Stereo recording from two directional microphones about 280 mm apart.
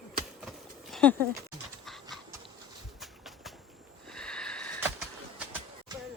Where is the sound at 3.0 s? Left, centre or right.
Centre.